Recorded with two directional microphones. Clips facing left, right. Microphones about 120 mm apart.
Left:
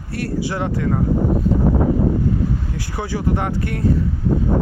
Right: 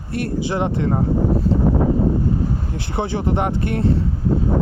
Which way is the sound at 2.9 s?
25° right (ahead or behind).